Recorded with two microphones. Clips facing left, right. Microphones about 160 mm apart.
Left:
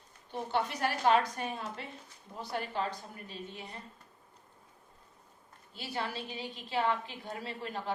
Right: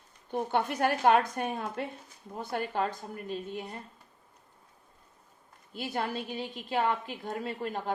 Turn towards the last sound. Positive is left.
turn(degrees=-50)  # may be behind; listen again after turning